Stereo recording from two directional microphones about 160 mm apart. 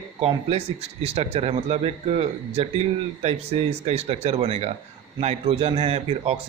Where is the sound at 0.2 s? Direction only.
40° right (ahead or behind).